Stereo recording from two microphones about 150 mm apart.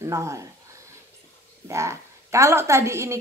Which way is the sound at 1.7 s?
20° right (ahead or behind).